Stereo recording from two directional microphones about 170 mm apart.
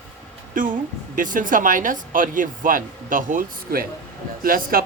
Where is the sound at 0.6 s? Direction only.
55° right (ahead or behind).